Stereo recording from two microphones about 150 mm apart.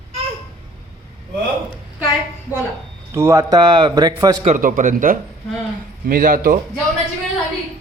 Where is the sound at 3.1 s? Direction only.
20° right (ahead or behind).